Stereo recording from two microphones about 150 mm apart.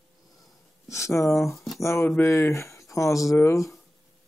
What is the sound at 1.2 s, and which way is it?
Speech, 20° left (ahead or behind).